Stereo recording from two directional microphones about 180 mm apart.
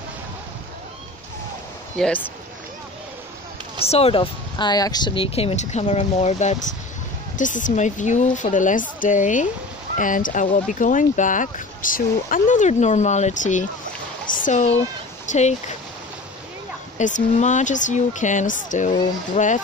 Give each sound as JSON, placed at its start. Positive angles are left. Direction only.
{"t": 2.0, "sound": "speech", "side_deg": 5}
{"t": 3.8, "sound": "speech", "side_deg": 35}
{"t": 17.0, "sound": "speech", "side_deg": 45}